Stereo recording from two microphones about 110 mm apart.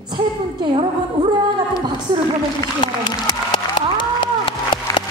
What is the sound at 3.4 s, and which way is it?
Applause, 45° left (ahead or behind).